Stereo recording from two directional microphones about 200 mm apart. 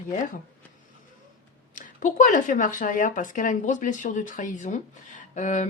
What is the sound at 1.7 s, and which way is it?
Speech, 40° left (ahead or behind).